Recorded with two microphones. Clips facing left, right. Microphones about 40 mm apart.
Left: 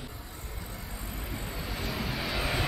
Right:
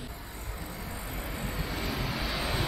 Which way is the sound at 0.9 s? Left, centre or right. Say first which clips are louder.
Even; centre.